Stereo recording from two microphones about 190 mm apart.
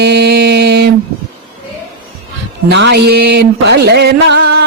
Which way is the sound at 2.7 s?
65° right (ahead or behind).